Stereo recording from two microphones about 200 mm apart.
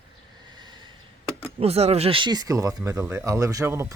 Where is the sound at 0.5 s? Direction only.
20° right (ahead or behind).